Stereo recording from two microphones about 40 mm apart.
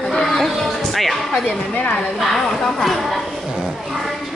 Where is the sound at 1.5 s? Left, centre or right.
Left.